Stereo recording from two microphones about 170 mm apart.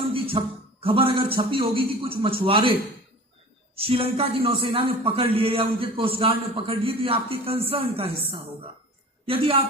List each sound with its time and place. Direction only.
0.1 s a man's voice: 35° right (ahead or behind)
9.2 s a woman's voice: 35° right (ahead or behind)